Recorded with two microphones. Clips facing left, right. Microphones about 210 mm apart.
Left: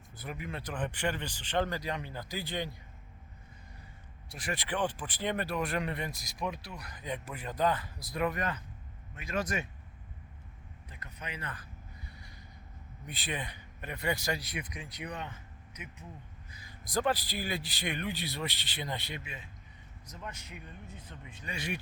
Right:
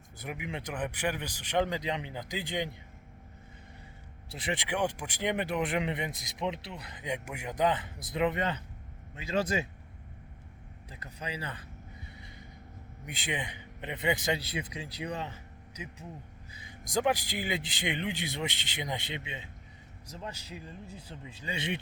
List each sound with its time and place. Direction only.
0.2 s speech: 15° right (ahead or behind)
4.3 s speech: 20° right (ahead or behind)
11.0 s speech: 30° right (ahead or behind)
13.1 s speech: 15° right (ahead or behind)
16.9 s speech: 15° right (ahead or behind)